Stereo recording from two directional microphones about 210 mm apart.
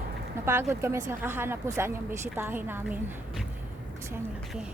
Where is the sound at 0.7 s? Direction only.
10° right (ahead or behind).